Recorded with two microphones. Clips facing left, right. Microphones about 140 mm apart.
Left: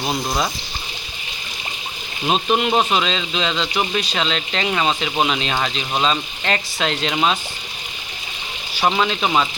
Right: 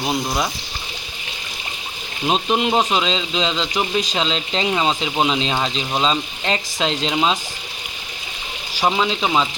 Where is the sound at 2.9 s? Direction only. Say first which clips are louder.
Even; 20° right (ahead or behind).